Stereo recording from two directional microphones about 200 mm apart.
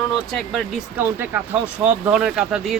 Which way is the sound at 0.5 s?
10° right (ahead or behind).